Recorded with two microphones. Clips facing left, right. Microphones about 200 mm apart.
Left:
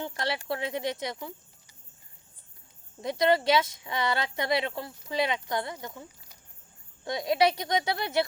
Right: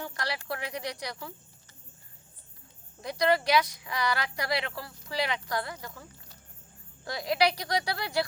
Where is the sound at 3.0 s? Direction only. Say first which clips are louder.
Left 2 dB; 25° left (ahead or behind).